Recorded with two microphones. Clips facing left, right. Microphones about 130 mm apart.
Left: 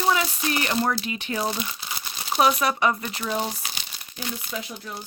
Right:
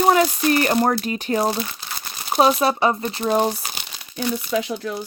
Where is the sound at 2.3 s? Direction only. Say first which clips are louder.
Right 4 dB; 30° right (ahead or behind).